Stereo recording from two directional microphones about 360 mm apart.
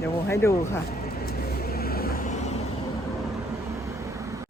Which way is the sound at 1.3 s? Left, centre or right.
Left.